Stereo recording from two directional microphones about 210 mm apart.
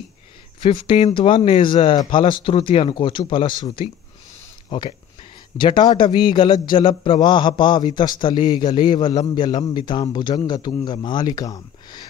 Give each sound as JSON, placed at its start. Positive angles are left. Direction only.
{"t": 0.6, "sound": "a man's voice", "side_deg": 25}